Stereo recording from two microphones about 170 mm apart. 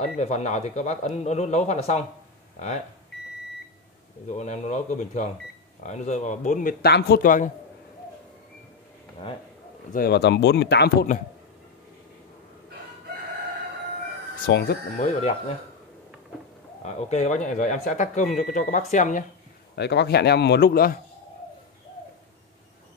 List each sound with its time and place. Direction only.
0.0 s speech: 45° left (ahead or behind)
4.3 s speech: 45° left (ahead or behind)
6.8 s speech: 70° left (ahead or behind); by 7.5 s 50° left (ahead or behind)
9.9 s a man's voice: 70° left (ahead or behind)
14.4 s a man's voice: 70° left (ahead or behind)
15.0 s speech: 40° left (ahead or behind)
16.8 s speech: 40° left (ahead or behind)
19.7 s a man's voice: 80° left; by 21.0 s 60° left (ahead or behind)